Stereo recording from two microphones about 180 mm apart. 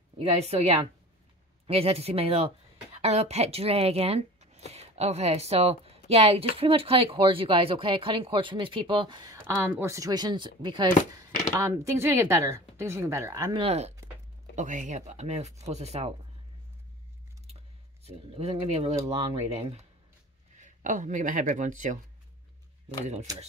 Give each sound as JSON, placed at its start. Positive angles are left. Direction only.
{"t": 0.2, "sound": "speech", "side_deg": -35}
{"t": 13.7, "sound": "speech", "side_deg": -35}
{"t": 18.0, "sound": "speech", "side_deg": -35}
{"t": 19.3, "sound": "speech", "side_deg": -15}
{"t": 19.6, "sound": "speech", "side_deg": -35}